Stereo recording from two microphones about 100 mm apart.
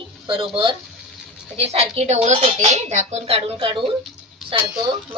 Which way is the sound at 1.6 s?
90° right.